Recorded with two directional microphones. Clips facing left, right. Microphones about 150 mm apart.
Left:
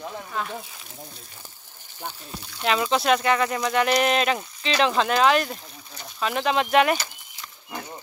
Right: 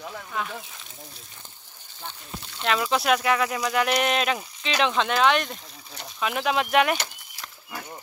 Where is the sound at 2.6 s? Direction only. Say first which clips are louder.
Left 2 dB; centre (ahead or behind).